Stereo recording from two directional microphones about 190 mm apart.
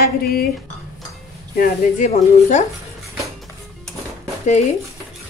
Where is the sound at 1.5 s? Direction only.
45° left (ahead or behind).